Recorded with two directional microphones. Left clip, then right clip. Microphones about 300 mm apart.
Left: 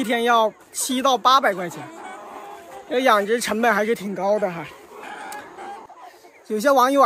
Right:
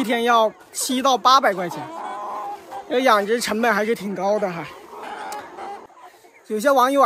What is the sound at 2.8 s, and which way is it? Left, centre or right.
Speech, centre.